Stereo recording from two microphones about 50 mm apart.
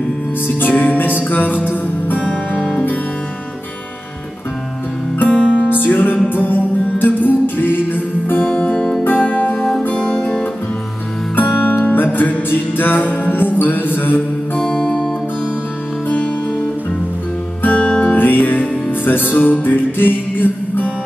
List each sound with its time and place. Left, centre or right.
0.6 s music: left
2.1 s music: left
5.3 s music: centre
5.7 s music: left
8.4 s music: left
9.6 s music: centre
9.9 s guitar: centre
11.3 s music: left
14.6 s music: left
17.7 s music: centre
18.1 s music: left
19.3 s music: left
19.6 s music: left